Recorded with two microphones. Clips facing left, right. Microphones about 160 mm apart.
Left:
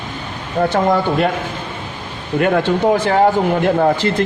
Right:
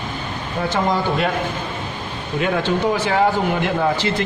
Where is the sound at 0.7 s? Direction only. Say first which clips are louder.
Left 3 dB; 55° left (ahead or behind).